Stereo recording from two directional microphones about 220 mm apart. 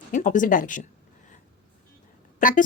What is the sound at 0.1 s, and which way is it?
Speech, 35° left (ahead or behind).